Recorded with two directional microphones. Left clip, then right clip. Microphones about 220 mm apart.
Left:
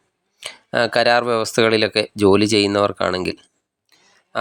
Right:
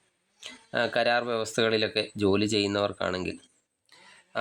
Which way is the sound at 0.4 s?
25° left (ahead or behind).